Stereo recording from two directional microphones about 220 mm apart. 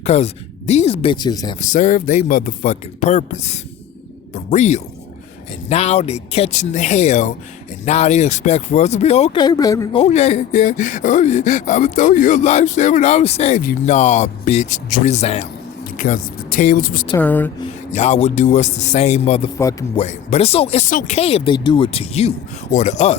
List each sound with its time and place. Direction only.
0.0 s a woman's voice: 30° left (ahead or behind)
1.6 s speech: 35° left (ahead or behind); by 10.0 s 15° left (ahead or behind)
10.0 s speech: 30° left (ahead or behind)
17.2 s speech: 10° left (ahead or behind)
17.9 s speech: 30° left (ahead or behind)